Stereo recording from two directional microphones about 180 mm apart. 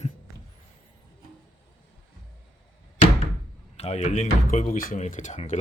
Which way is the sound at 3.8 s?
40° left (ahead or behind).